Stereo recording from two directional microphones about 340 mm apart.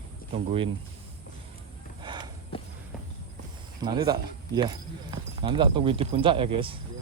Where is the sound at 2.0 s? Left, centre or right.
Centre.